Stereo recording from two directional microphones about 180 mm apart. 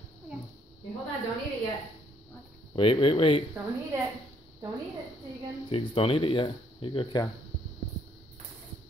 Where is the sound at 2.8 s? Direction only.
30° left (ahead or behind).